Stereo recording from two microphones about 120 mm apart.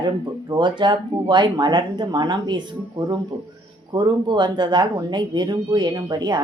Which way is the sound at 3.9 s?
40° right (ahead or behind).